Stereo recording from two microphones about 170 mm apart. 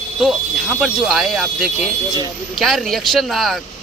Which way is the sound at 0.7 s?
5° right (ahead or behind).